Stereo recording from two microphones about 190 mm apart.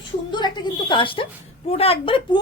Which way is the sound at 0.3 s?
25° left (ahead or behind).